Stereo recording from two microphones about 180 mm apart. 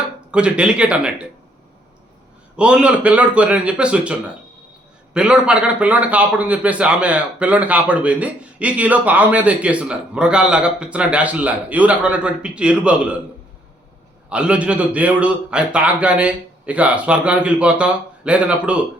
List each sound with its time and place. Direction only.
0.3 s speech: 5° right (ahead or behind)
2.6 s a man's voice: 5° right (ahead or behind)
14.3 s a man's voice: 5° right (ahead or behind)